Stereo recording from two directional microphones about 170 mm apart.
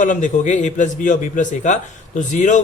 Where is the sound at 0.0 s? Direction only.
45° left (ahead or behind).